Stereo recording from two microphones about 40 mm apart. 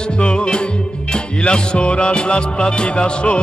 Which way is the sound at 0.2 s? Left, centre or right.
Left.